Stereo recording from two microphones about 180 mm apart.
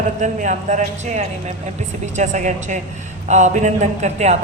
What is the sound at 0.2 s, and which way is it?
A woman's voice, 40° right (ahead or behind).